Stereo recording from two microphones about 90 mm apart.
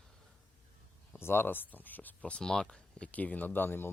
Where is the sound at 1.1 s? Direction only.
25° left (ahead or behind).